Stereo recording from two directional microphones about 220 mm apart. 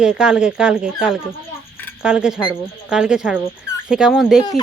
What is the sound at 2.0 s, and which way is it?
A woman's voice, 5° right (ahead or behind).